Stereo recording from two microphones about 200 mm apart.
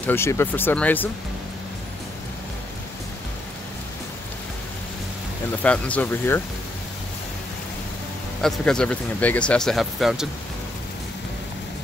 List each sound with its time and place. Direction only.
0.0 s speech: 10° left (ahead or behind)
5.6 s speech: 5° left (ahead or behind)
8.4 s speech: 5° left (ahead or behind)